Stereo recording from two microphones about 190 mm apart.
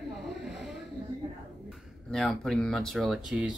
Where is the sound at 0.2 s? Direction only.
Centre (ahead or behind).